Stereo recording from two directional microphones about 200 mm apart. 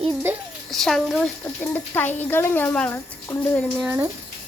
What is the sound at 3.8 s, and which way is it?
Speech, 10° right (ahead or behind).